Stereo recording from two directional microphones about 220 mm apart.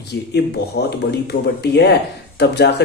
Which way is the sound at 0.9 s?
50° left (ahead or behind).